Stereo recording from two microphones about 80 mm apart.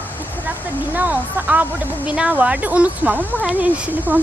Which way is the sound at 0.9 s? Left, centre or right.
Right.